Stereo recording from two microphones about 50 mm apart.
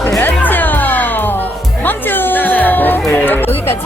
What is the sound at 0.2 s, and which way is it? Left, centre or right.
Music, left.